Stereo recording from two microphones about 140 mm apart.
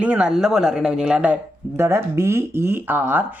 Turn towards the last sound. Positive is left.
turn(degrees=-15)  # may be behind; listen again after turning